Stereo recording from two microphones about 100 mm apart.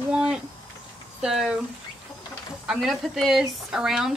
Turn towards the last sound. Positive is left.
turn(degrees=-5)  # may be behind; listen again after turning